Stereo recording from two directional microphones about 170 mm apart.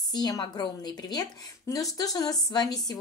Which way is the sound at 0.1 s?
25° left (ahead or behind).